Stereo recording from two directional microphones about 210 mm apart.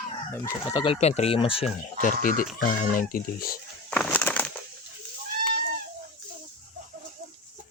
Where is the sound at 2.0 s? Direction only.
40° left (ahead or behind).